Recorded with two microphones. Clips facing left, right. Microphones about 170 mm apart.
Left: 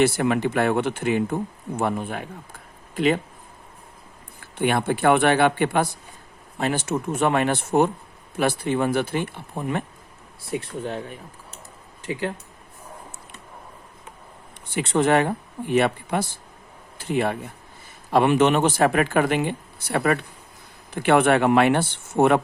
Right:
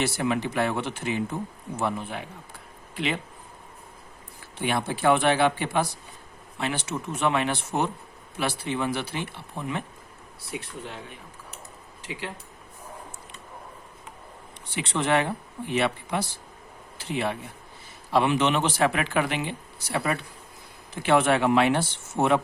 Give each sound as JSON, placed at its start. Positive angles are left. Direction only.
{"t": 0.0, "sound": "speech", "side_deg": 55}
{"t": 4.4, "sound": "speech", "side_deg": 55}
{"t": 6.6, "sound": "speech", "side_deg": 45}
{"t": 14.7, "sound": "speech", "side_deg": 45}